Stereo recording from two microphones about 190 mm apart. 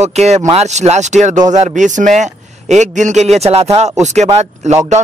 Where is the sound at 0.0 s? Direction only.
35° right (ahead or behind).